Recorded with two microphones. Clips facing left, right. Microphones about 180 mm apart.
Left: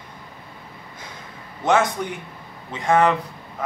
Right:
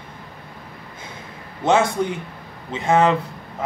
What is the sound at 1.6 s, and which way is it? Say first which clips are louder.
A man's voice: right 2 dB; 25° right (ahead or behind).